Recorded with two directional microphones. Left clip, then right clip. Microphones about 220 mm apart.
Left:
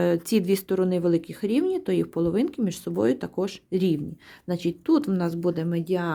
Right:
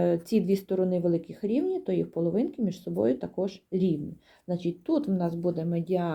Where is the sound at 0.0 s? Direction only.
30° left (ahead or behind).